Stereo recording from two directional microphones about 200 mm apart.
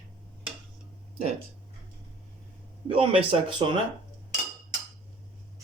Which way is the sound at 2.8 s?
25° right (ahead or behind).